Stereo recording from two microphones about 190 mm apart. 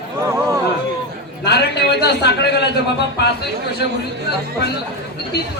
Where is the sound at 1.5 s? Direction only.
60° left (ahead or behind).